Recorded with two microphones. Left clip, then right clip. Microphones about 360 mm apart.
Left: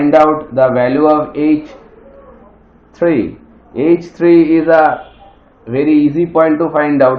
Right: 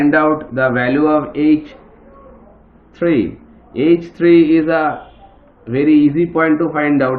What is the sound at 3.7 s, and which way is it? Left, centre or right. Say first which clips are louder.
A man's voice: left 1 dB; centre.